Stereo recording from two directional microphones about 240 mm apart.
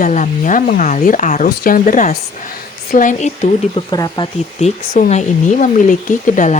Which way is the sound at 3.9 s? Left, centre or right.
Centre.